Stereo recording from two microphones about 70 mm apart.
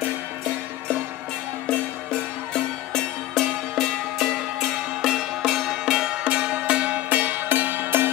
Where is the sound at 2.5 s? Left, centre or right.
Centre.